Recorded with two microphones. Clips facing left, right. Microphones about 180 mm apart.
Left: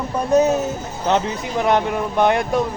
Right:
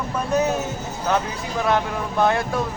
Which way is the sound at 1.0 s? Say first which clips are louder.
Left 4 dB; 20° left (ahead or behind).